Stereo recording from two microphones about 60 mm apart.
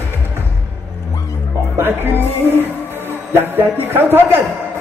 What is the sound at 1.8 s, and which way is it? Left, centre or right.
Music, right.